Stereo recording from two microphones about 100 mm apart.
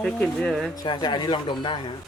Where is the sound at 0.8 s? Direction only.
45° left (ahead or behind).